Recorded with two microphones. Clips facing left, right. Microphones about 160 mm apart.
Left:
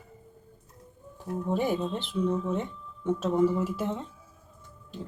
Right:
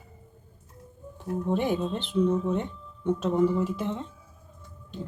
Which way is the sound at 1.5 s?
5° left (ahead or behind).